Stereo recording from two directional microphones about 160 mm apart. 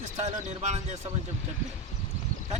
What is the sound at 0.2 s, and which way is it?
Speech, 45° right (ahead or behind).